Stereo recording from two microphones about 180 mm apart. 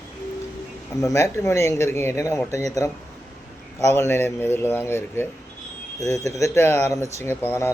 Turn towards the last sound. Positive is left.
turn(degrees=10)  # may be behind; listen again after turning